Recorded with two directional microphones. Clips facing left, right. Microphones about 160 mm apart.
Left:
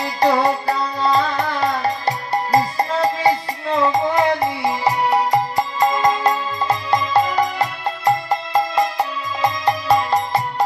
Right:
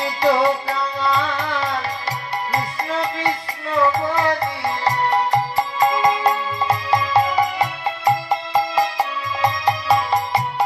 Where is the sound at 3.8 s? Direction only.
20° left (ahead or behind).